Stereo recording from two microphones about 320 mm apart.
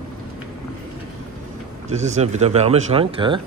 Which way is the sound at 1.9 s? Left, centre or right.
Right.